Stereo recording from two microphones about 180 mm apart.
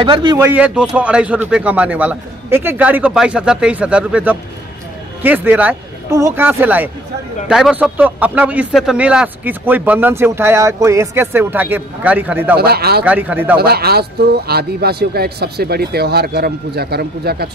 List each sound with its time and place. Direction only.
0.0 s speech: 25° right (ahead or behind)
0.4 s speech: 10° right (ahead or behind)
12.5 s speech: 60° right (ahead or behind)
13.0 s speech: 10° right (ahead or behind)
13.6 s speech: 60° right (ahead or behind)